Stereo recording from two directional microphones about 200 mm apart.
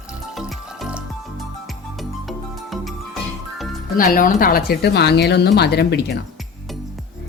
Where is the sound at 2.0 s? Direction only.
Centre (ahead or behind).